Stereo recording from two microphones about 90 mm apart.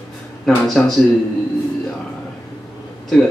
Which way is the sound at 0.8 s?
5° left (ahead or behind).